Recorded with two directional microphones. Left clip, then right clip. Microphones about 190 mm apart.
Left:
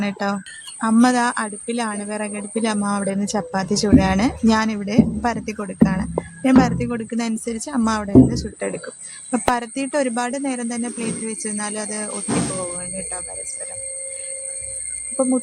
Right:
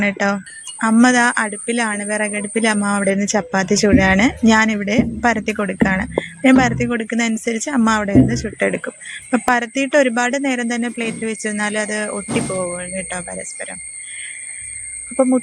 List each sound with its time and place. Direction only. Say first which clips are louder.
0.0 s a woman's voice: right 6 dB; 10° right (ahead or behind)
15.1 s speech: right 5 dB; 15° right (ahead or behind)